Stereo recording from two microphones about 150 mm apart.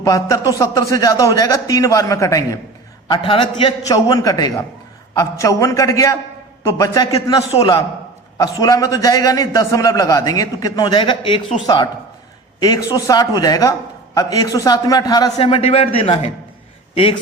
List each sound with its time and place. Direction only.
0.0 s a man's voice: 20° left (ahead or behind)
3.1 s a man's voice: 35° left (ahead or behind)
15.4 s a man's voice: 40° left (ahead or behind)